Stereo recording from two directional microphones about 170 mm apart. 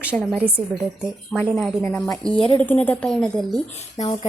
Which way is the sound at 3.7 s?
40° left (ahead or behind).